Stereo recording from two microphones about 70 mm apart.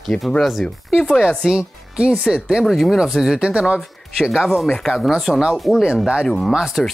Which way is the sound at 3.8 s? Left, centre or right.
Centre.